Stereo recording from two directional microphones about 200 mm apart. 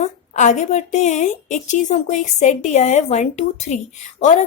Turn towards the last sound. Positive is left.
turn(degrees=35)  # may be behind; listen again after turning